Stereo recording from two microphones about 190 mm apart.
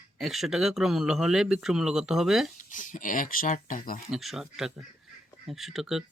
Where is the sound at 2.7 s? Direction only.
45° left (ahead or behind).